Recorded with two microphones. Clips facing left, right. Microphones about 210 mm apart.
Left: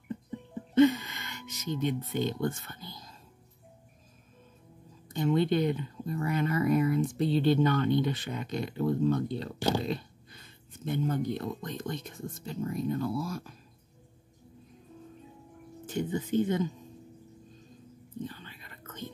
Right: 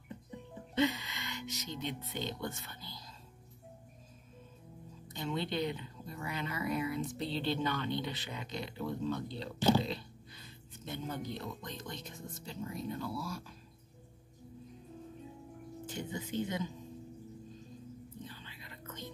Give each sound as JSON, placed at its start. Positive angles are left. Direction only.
{"t": 0.7, "sound": "speech", "side_deg": 50}
{"t": 5.1, "sound": "speech", "side_deg": 50}
{"t": 9.8, "sound": "beatboxing", "side_deg": 50}
{"t": 10.9, "sound": "speech", "side_deg": 55}
{"t": 15.9, "sound": "speech", "side_deg": 55}
{"t": 18.2, "sound": "whispering", "side_deg": 50}